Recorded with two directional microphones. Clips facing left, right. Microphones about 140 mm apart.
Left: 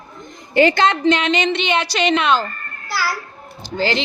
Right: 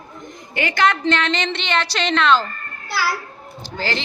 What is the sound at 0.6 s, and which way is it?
A woman's voice, 30° left (ahead or behind).